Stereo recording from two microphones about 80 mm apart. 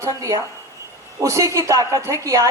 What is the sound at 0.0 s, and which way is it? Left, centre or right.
A woman's voice, right.